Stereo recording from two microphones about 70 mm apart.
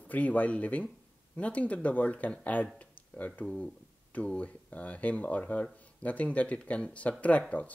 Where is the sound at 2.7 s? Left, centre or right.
Centre.